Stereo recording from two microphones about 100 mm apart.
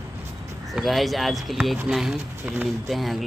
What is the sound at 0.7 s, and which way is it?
Speech, centre (ahead or behind).